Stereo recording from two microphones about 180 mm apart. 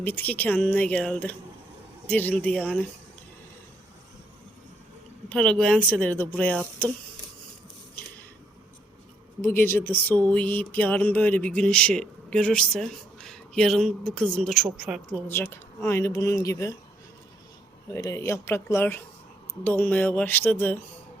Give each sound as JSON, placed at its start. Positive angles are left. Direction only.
{"t": 0.0, "sound": "speech", "side_deg": 10}
{"t": 5.3, "sound": "speech", "side_deg": 5}
{"t": 9.6, "sound": "speech", "side_deg": 10}
{"t": 15.3, "sound": "speech", "side_deg": 15}
{"t": 17.9, "sound": "speech", "side_deg": 15}